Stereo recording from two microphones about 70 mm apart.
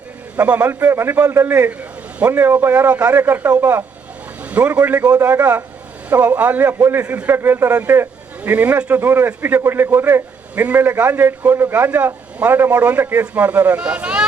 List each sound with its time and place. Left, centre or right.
0.3 s a man's voice: right
0.7 s a man's voice: right
2.7 s a man's voice: right
4.4 s a man's voice: right
6.8 s speech: right
7.1 s a man's voice: right